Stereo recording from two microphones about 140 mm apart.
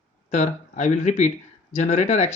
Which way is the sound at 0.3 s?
55° left (ahead or behind).